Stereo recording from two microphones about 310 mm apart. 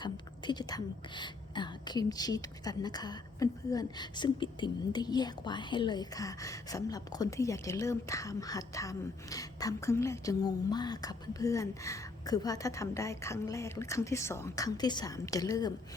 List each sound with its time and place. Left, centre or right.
0.0 s a woman's voice: centre